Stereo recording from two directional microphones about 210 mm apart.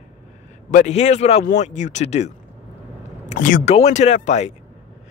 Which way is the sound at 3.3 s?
40° left (ahead or behind).